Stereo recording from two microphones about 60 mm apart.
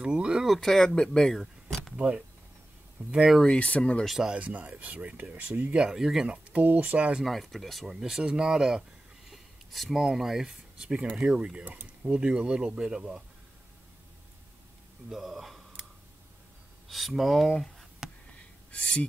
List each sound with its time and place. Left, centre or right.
0.0 s a sound: centre
0.5 s speech: centre
0.9 s a sound: centre
2.0 s speech: right
3.2 s speech: centre
3.5 s speech: left
4.0 s speech: centre
4.3 s speech: right; by 6.2 s centre
6.2 s speech: centre
7.2 s speech: centre
9.3 s speech: centre
11.6 s speech: right; by 13.0 s centre
15.0 s speech: centre
16.9 s speech: centre